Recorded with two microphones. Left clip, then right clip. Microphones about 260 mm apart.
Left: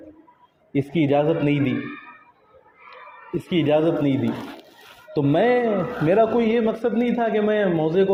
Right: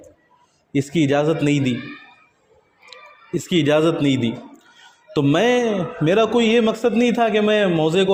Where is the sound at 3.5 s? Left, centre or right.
Right.